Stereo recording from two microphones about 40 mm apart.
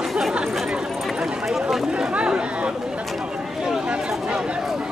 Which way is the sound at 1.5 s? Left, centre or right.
Centre.